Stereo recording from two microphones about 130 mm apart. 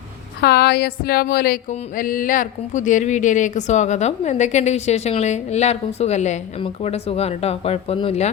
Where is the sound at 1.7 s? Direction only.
90° left.